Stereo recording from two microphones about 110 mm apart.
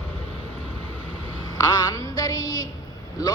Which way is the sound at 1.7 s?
35° left (ahead or behind).